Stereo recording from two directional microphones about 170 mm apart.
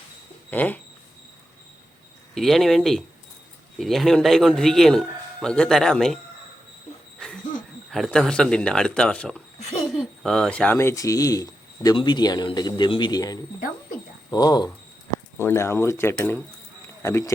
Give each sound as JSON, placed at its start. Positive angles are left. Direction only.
{"t": 0.5, "sound": "speech", "side_deg": 10}
{"t": 2.3, "sound": "a man's voice", "side_deg": 0}
{"t": 7.9, "sound": "a man's voice", "side_deg": 0}
{"t": 9.6, "sound": "laughter", "side_deg": 40}
{"t": 10.0, "sound": "speech", "side_deg": 0}